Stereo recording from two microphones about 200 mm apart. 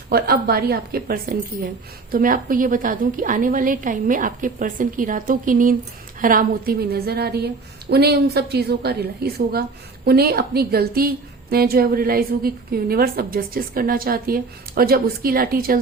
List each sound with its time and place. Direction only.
0.1 s a woman's voice: 50° right (ahead or behind)